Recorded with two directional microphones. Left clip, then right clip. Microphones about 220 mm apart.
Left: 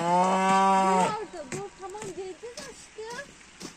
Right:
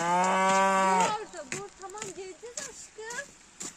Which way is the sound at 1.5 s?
15° left (ahead or behind).